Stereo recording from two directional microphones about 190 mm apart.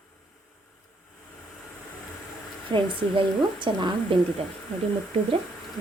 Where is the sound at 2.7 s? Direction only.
25° right (ahead or behind).